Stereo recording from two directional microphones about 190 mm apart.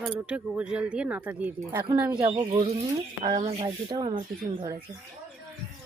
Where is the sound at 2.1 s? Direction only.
25° right (ahead or behind).